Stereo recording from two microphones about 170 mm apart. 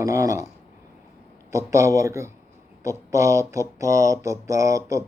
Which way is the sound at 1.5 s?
15° right (ahead or behind).